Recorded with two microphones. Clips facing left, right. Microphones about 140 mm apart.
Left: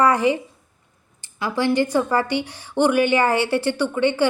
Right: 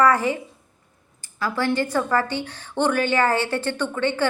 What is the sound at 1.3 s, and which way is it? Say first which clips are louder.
A woman's voice: left 3 dB; 15° left (ahead or behind).